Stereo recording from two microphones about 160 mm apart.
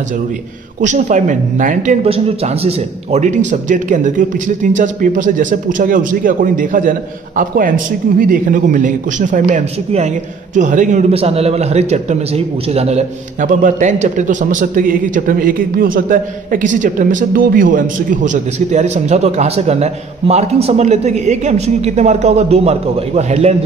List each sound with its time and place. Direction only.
0.7 s a man's voice: 50° right (ahead or behind)
2.0 s a man's voice: 40° right (ahead or behind)